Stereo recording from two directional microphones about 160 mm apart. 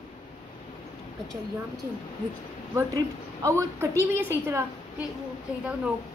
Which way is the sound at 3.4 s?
15° right (ahead or behind).